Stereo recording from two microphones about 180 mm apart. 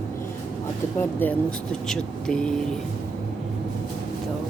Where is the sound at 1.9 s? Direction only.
5° left (ahead or behind).